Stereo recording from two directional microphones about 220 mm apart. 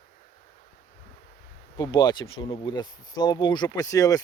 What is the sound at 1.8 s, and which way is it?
Speech, 20° left (ahead or behind).